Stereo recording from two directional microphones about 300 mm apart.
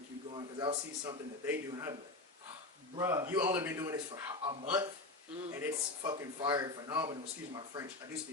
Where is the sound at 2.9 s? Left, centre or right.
Centre.